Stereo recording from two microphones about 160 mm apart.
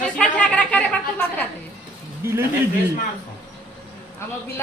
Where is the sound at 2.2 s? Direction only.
15° right (ahead or behind).